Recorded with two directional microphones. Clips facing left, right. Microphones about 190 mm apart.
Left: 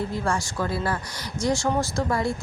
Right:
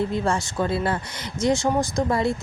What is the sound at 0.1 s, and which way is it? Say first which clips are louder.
Speech: right 3 dB; 25° right (ahead or behind).